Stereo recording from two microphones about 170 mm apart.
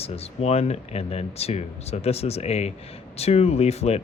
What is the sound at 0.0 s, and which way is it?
Speech, 35° left (ahead or behind).